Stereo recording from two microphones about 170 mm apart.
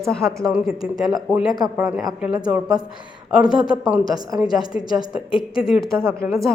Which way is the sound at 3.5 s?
5° right (ahead or behind).